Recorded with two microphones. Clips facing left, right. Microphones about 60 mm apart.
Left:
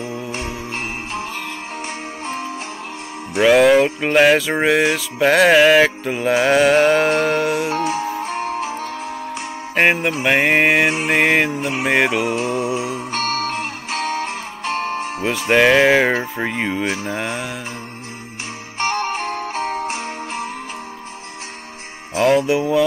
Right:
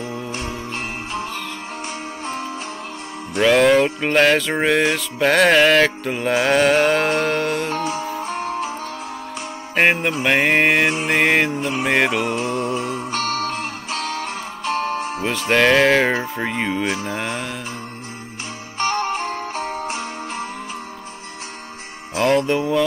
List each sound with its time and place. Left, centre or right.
0.0 s jingle bell: centre
3.3 s music: centre
7.8 s music: left
9.8 s music: centre
13.1 s music: left
15.2 s speech: centre
18.8 s music: left
22.2 s music: centre